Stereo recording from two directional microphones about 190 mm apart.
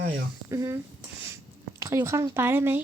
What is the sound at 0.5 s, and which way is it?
Speech, 15° right (ahead or behind).